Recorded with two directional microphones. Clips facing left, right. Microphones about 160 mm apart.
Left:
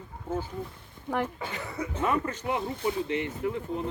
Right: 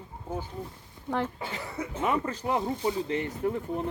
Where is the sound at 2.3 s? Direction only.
35° right (ahead or behind).